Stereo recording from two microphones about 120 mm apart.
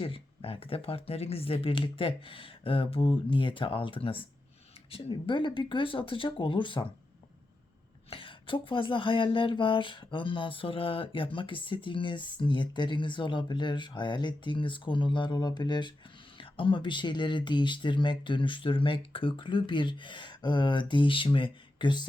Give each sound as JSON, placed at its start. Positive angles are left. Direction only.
{"t": 0.0, "sound": "speech", "side_deg": 50}
{"t": 8.1, "sound": "speech", "side_deg": 45}